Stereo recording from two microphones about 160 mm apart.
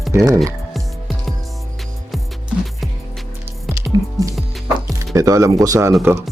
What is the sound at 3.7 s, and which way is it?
Music, 20° right (ahead or behind).